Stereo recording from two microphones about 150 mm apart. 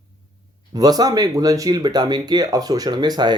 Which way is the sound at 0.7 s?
25° right (ahead or behind).